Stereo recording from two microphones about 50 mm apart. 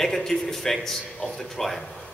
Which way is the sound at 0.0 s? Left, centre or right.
Centre.